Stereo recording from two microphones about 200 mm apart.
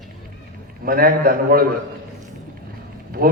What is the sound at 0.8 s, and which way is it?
Speech, 45° right (ahead or behind).